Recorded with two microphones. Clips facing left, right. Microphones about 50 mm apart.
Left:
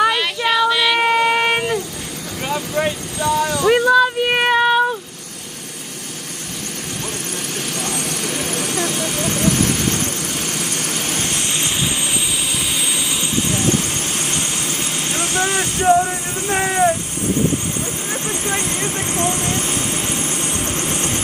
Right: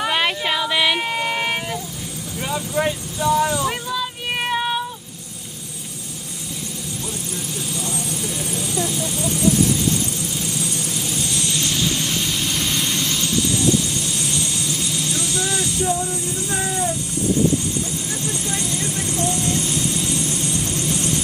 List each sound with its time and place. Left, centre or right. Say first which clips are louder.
0.5 s child singing: left 7 dB; centre
0.9 s a sound: left 7 dB; left
3.2 s a sound: even; left
7.7 s vehicle: left 3 dB; left
12.5 s vehicle: even; centre
13.6 s vehicle: even; left
18.2 s vehicle: left 5 dB; left